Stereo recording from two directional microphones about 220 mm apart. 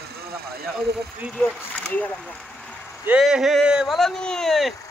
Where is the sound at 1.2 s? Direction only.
Centre (ahead or behind).